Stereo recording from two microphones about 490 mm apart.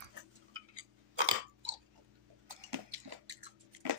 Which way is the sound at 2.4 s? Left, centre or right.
Right.